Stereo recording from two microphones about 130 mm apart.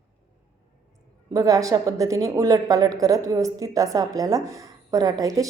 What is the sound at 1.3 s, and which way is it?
A woman's voice, 25° right (ahead or behind).